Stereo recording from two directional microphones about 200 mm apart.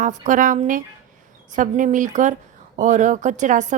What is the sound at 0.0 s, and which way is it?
Speech, 40° right (ahead or behind).